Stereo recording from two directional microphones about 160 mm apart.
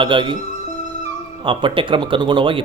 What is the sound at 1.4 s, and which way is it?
Speech, 30° right (ahead or behind).